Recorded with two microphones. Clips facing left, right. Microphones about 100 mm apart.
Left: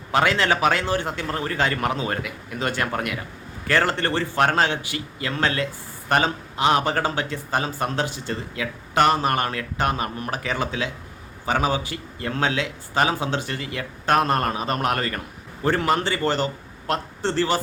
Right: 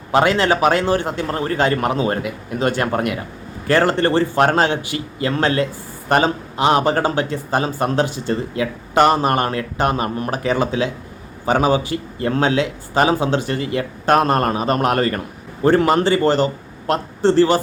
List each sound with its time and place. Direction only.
0.1 s speech: 35° right (ahead or behind)